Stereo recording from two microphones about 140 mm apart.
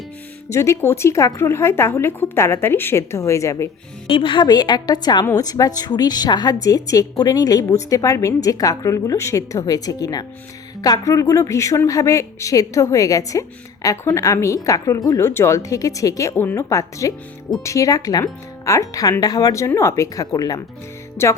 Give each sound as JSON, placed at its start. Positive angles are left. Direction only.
{"t": 0.5, "sound": "a woman's voice", "side_deg": 20}
{"t": 4.0, "sound": "a woman's voice", "side_deg": 35}
{"t": 21.2, "sound": "music", "side_deg": 15}